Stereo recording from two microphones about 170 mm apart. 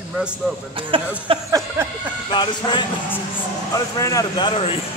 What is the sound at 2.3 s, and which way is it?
Speech, 25° left (ahead or behind).